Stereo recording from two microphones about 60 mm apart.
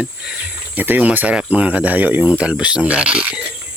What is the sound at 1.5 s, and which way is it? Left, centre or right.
Speech, right.